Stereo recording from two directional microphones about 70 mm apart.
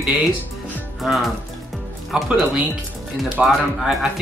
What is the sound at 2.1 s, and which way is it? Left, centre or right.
Speech, centre.